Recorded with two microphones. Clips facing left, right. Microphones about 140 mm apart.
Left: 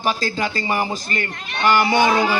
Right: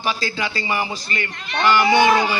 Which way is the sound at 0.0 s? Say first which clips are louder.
Left 2 dB; 45° left (ahead or behind).